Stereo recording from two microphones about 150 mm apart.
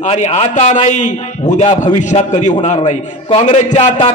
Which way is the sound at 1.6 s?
35° left (ahead or behind).